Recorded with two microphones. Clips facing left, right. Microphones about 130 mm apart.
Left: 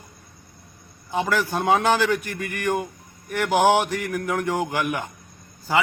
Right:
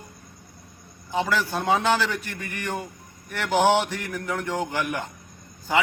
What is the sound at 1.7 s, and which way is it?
Speech, 50° left (ahead or behind).